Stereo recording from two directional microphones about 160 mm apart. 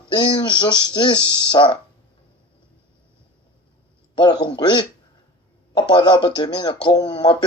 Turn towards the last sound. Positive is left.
turn(degrees=30)  # may be behind; listen again after turning